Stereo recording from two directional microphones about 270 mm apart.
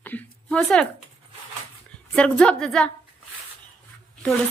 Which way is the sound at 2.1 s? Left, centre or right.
Centre.